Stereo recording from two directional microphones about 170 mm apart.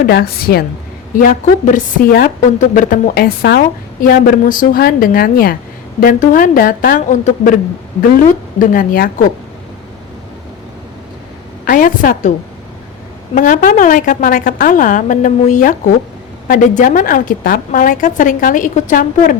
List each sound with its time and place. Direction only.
0.0 s a woman's voice: 65° left (ahead or behind)
1.2 s a woman's voice: 50° left (ahead or behind); by 3.6 s 70° left (ahead or behind)
4.0 s a woman's voice: 55° left (ahead or behind)
11.6 s a woman's voice: 55° left (ahead or behind)
13.3 s a woman's voice: 50° left (ahead or behind)